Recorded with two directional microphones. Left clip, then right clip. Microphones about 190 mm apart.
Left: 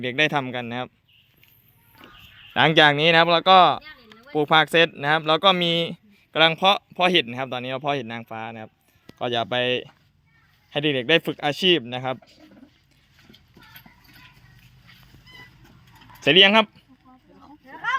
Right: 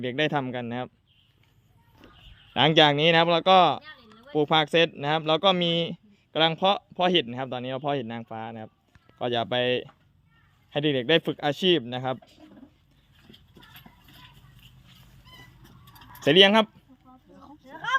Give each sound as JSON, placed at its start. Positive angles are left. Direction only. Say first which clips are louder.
{"t": 0.0, "sound": "speech", "louder": "left 4 dB", "side_deg": 0}
{"t": 2.5, "sound": "speech", "louder": "left 3 dB", "side_deg": 0}
{"t": 3.8, "sound": "a sound", "louder": "left 2 dB", "side_deg": 55}
{"t": 4.4, "sound": "speech", "louder": "left 4 dB", "side_deg": 0}
{"t": 16.2, "sound": "speech", "louder": "left 3 dB", "side_deg": -5}